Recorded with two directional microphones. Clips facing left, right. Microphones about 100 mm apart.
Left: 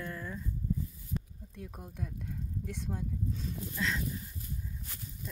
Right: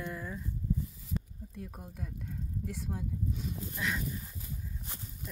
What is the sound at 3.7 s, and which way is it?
Speech, 15° right (ahead or behind).